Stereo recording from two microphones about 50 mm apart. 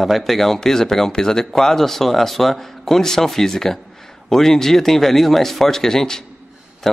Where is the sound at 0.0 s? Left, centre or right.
Centre.